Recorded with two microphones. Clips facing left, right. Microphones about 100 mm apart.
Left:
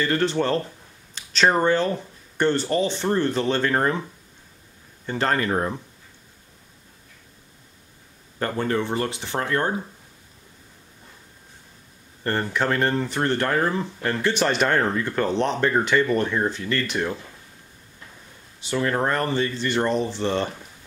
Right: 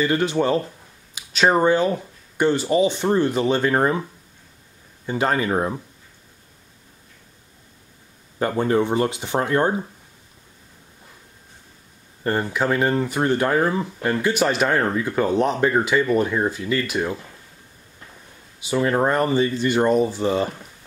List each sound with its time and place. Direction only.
0.0 s speech: 10° right (ahead or behind)
5.0 s speech: 10° right (ahead or behind)
8.4 s speech: 15° right (ahead or behind)
12.2 s speech: 10° right (ahead or behind)
18.6 s speech: 10° right (ahead or behind)